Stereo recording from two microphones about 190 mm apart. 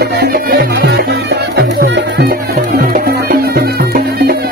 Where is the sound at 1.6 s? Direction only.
60° right (ahead or behind).